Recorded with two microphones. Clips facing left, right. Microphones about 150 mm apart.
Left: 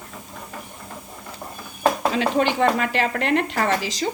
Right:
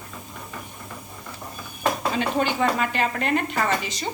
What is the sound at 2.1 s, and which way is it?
Speech, 85° left.